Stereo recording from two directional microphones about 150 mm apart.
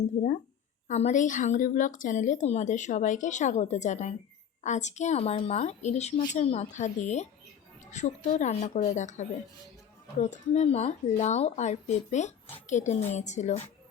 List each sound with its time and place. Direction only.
0.2 s a woman's voice: 55° left (ahead or behind)